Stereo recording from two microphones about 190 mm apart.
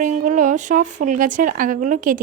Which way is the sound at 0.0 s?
40° right (ahead or behind).